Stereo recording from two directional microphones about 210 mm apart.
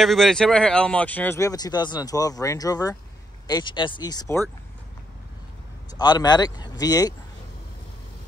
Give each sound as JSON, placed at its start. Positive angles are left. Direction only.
{"t": 0.0, "sound": "speech", "side_deg": 0}
{"t": 5.9, "sound": "speech", "side_deg": 20}